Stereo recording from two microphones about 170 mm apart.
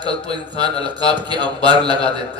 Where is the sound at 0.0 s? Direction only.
25° right (ahead or behind).